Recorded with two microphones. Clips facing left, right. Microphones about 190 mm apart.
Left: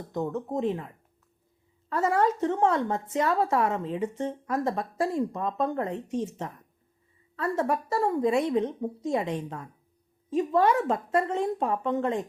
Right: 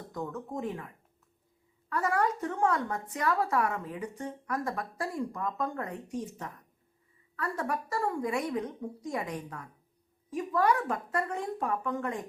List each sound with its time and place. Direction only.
0.1 s a woman's voice: 25° left (ahead or behind)
1.9 s a woman's voice: 25° left (ahead or behind)